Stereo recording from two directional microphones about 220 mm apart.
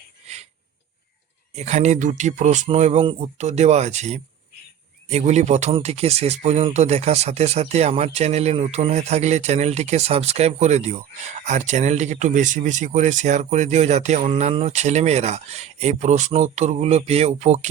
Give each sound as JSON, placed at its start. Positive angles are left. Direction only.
{"t": 1.5, "sound": "speech", "side_deg": -30}